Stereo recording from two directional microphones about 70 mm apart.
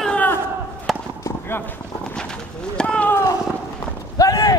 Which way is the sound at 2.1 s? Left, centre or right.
Centre.